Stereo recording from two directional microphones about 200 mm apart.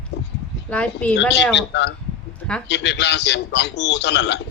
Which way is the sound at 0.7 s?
5° left (ahead or behind).